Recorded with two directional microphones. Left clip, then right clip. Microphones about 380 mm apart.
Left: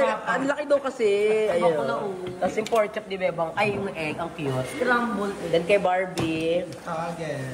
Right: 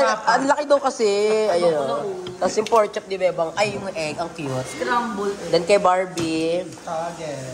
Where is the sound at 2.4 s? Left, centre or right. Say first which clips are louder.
Right 5 dB; centre.